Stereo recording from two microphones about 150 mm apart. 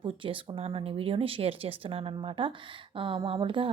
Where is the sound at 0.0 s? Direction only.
35° right (ahead or behind).